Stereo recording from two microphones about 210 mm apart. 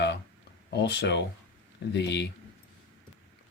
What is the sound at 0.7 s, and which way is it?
Speech, 55° left (ahead or behind).